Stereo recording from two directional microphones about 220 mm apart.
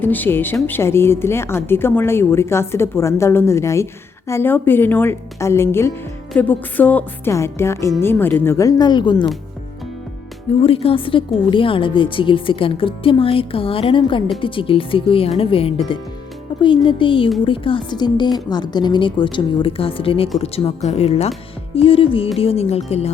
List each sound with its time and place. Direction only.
0.0 s a woman's voice: 10° left (ahead or behind)
10.6 s speech: 25° left (ahead or behind)